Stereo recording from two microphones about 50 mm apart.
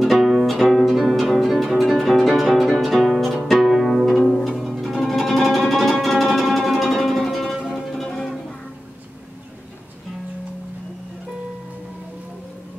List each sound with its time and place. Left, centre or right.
0.0 s music: centre
3.4 s harp: centre
4.4 s music: centre
7.5 s music: centre
7.9 s music: centre